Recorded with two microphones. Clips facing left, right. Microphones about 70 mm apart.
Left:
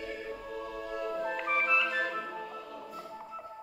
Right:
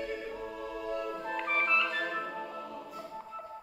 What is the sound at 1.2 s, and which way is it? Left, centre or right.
Music, centre.